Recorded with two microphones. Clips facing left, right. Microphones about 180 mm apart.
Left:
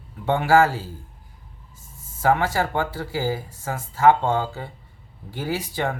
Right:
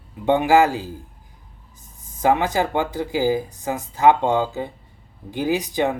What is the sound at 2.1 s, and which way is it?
Speech, 20° right (ahead or behind).